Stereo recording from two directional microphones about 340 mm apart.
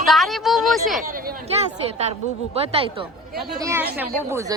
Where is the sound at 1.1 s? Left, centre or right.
Right.